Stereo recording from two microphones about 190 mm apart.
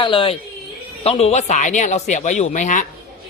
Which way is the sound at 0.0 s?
25° left (ahead or behind).